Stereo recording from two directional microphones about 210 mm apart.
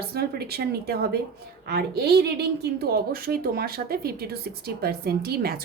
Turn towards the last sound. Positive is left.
turn(degrees=-45)  # may be behind; listen again after turning